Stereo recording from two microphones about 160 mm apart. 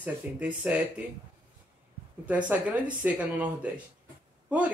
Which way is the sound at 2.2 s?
10° right (ahead or behind).